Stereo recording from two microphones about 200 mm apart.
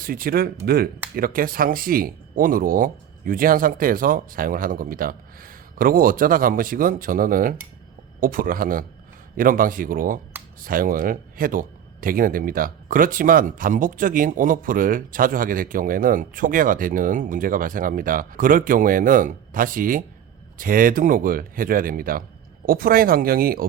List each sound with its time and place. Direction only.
0.0 s a man's voice: 45° right (ahead or behind)